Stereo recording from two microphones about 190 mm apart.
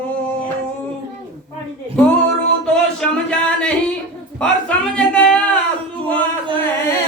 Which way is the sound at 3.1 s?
5° left (ahead or behind).